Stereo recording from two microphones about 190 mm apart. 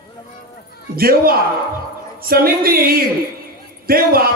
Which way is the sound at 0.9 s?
50° right (ahead or behind).